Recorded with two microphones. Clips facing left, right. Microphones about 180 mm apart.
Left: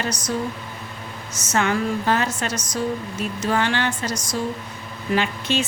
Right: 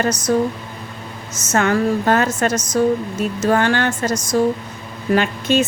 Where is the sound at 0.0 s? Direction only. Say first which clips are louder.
Right 8 dB; 45° right (ahead or behind).